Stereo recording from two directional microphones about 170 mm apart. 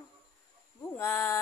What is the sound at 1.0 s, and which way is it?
Speech, 15° left (ahead or behind).